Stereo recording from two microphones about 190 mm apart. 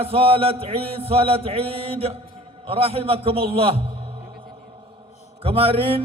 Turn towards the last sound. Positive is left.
turn(degrees=-30)  # may be behind; listen again after turning